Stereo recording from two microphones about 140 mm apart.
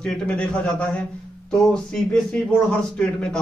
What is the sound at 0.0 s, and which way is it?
A man's voice, 5° left (ahead or behind).